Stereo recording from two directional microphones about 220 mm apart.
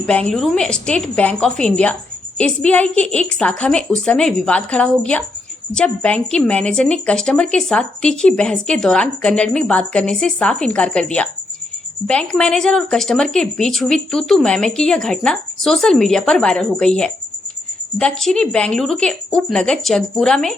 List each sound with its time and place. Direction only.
0.0 s speech: 5° left (ahead or behind)